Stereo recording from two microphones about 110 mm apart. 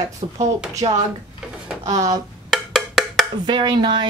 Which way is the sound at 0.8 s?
50° right (ahead or behind).